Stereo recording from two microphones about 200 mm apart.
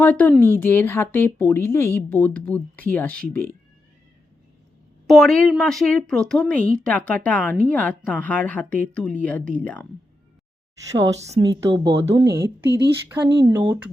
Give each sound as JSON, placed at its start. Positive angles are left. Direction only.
{"t": 0.0, "sound": "speech", "side_deg": 10}
{"t": 5.0, "sound": "speech", "side_deg": 0}
{"t": 11.4, "sound": "a woman's voice", "side_deg": -20}